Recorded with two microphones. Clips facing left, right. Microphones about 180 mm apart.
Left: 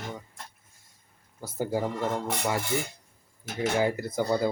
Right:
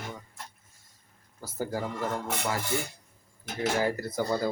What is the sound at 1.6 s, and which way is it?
Speech, 20° left (ahead or behind).